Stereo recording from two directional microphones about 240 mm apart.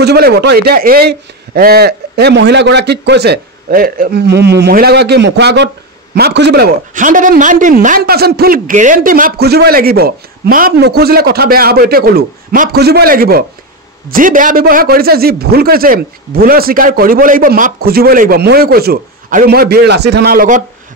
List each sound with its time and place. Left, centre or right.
0.0 s a man's voice: right